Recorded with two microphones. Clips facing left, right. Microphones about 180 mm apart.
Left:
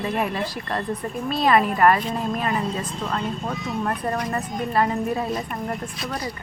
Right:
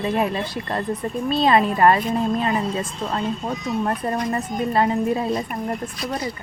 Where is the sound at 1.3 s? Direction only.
25° right (ahead or behind).